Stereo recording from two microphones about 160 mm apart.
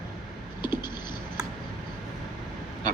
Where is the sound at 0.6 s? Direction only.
30° left (ahead or behind).